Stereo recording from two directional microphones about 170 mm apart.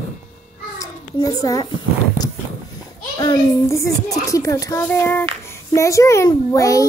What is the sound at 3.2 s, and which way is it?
A child's voice, 20° left (ahead or behind).